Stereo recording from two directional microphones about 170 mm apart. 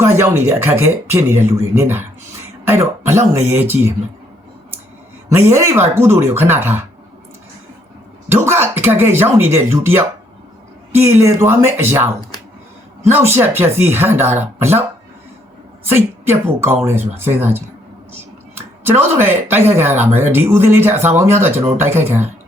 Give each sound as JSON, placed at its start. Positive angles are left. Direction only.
{"t": 0.0, "sound": "speech", "side_deg": -15}
{"t": 5.3, "sound": "speech", "side_deg": -15}
{"t": 8.3, "sound": "speech", "side_deg": -15}
{"t": 11.2, "sound": "speech", "side_deg": -15}
{"t": 13.1, "sound": "speech", "side_deg": -15}
{"t": 15.9, "sound": "speech", "side_deg": -15}